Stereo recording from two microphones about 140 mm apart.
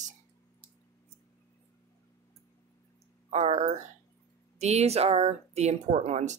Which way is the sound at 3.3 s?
50° right (ahead or behind).